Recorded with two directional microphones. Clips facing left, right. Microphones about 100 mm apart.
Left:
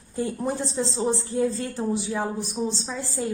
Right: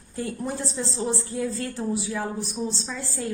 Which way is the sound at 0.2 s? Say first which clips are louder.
Left 3 dB; 20° left (ahead or behind).